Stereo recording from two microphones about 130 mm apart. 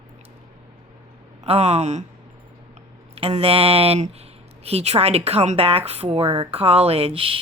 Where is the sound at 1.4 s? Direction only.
55° right (ahead or behind).